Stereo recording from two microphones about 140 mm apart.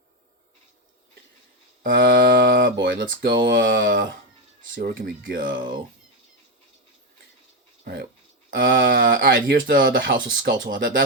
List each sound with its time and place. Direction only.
1.8 s speech: 90° right
8.4 s speech: 80° right